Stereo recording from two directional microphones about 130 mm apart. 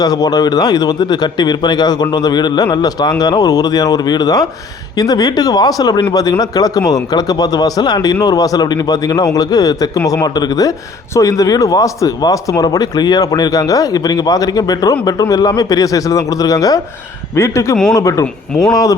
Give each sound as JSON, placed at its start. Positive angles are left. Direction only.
{"t": 0.0, "sound": "speech", "side_deg": 30}